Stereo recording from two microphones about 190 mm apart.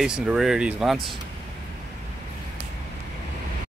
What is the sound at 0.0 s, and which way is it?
Speech, 5° right (ahead or behind).